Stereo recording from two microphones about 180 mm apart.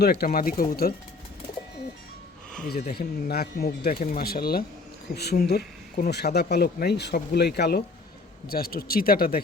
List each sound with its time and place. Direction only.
0.0 s speech: 60° left (ahead or behind)
2.6 s speech: 60° left (ahead or behind)